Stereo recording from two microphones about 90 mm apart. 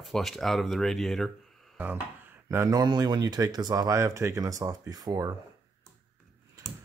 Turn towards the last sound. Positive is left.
turn(degrees=-45)  # may be behind; listen again after turning